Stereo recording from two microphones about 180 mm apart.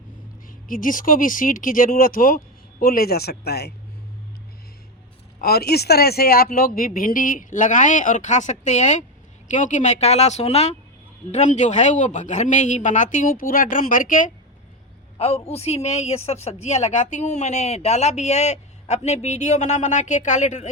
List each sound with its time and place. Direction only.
0.4 s speech: 50° left (ahead or behind)
5.4 s a woman's voice: 60° left (ahead or behind)
15.2 s a woman's voice: 35° left (ahead or behind)